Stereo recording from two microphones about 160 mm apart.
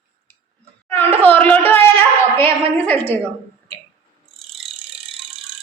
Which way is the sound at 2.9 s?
10° left (ahead or behind).